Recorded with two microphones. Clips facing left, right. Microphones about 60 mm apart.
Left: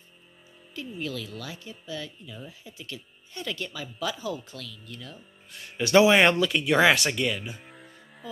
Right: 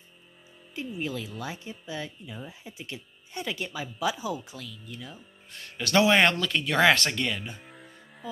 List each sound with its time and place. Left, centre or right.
0.9 s speech: right
5.8 s a man's voice: centre